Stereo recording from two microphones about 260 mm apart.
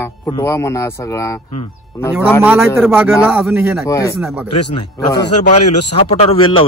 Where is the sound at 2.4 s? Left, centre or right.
Centre.